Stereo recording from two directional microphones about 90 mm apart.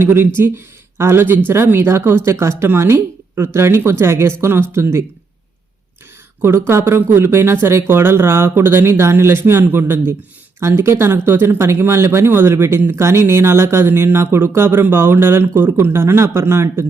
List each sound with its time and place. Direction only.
0.0 s speech: 25° right (ahead or behind)
6.4 s speech: 30° right (ahead or behind)